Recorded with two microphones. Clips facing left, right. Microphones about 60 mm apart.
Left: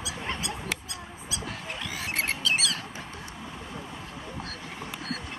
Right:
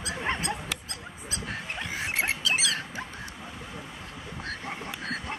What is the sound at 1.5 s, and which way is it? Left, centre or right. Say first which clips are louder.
Pig: right 4 dB; right.